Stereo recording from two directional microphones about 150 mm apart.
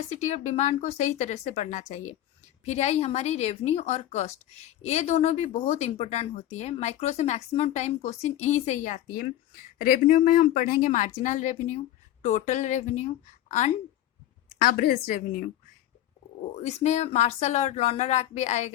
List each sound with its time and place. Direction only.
0.1 s a woman's voice: 50° left (ahead or behind)
9.8 s a woman's voice: 70° left (ahead or behind); by 13.7 s 50° left (ahead or behind)
14.7 s a woman's voice: 85° left
16.6 s a woman's voice: 50° left (ahead or behind)